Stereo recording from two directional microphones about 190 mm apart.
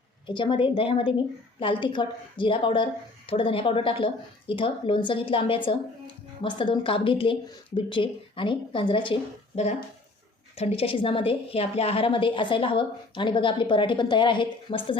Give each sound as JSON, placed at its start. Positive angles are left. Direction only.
{"t": 0.3, "sound": "a woman's voice", "side_deg": 25}
{"t": 10.5, "sound": "a woman's voice", "side_deg": 30}